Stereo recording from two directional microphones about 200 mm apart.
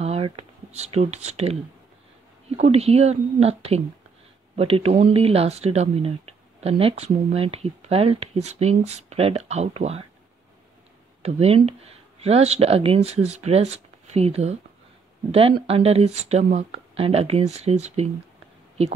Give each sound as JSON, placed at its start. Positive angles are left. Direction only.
{"t": 0.0, "sound": "speech", "side_deg": -30}
{"t": 11.2, "sound": "speech", "side_deg": -30}
{"t": 15.6, "sound": "speech", "side_deg": -30}